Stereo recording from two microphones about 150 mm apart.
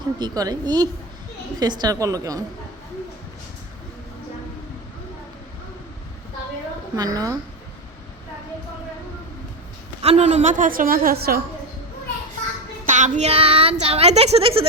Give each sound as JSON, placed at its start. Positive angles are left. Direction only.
{"t": 0.2, "sound": "a woman's voice", "side_deg": -25}
{"t": 6.9, "sound": "a woman's voice", "side_deg": -25}
{"t": 10.0, "sound": "a woman's voice", "side_deg": -45}
{"t": 12.8, "sound": "a child's voice", "side_deg": -55}